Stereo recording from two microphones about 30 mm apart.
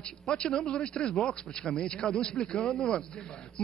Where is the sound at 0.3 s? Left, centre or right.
Left.